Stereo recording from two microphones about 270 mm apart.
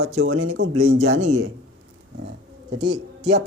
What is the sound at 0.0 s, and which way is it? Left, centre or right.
Speech, right.